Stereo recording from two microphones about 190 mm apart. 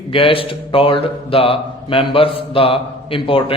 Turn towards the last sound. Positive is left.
turn(degrees=30)  # may be behind; listen again after turning